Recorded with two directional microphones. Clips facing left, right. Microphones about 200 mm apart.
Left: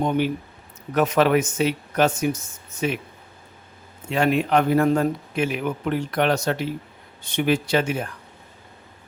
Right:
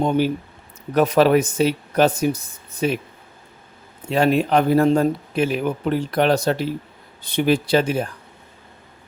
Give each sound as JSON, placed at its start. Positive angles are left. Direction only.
{"t": 0.9, "sound": "a man's voice", "side_deg": -35}
{"t": 4.1, "sound": "a man's voice", "side_deg": -35}